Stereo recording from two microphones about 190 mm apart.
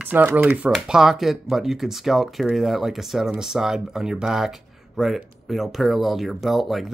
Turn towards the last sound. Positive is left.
turn(degrees=0)  # may be behind; listen again after turning